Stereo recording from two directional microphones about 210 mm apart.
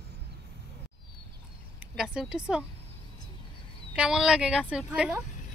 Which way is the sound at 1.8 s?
5° right (ahead or behind).